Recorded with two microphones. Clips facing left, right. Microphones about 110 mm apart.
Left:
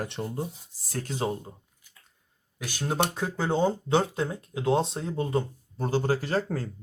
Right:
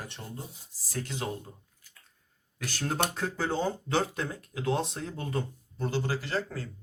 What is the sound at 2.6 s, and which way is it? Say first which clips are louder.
Speech: left 3 dB; 15° left (ahead or behind).